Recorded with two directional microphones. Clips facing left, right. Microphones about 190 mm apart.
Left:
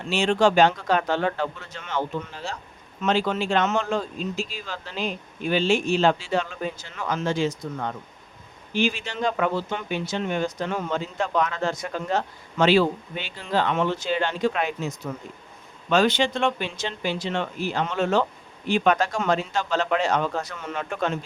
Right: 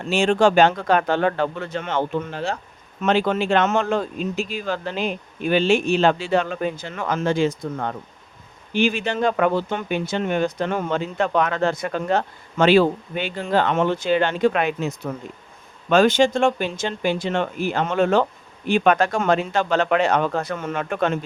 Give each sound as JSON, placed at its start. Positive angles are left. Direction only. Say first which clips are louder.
{"t": 0.0, "sound": "speech", "louder": "right 3 dB", "side_deg": -50}
{"t": 15.9, "sound": "speech", "louder": "right 5 dB", "side_deg": -50}